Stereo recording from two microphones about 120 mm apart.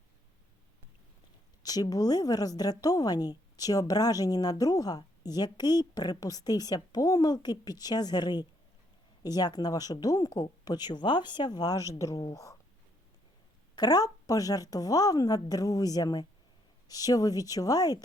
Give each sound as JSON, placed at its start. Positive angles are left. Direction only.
{"t": 1.6, "sound": "a woman's voice", "side_deg": 30}
{"t": 13.7, "sound": "a woman's voice", "side_deg": 35}